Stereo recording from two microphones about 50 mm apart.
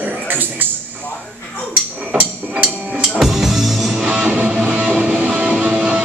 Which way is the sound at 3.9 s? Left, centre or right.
Centre.